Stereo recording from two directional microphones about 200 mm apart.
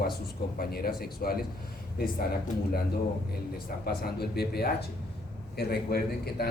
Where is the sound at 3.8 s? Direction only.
50° left (ahead or behind).